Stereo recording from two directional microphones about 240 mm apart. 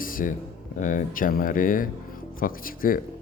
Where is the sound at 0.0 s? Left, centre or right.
Left.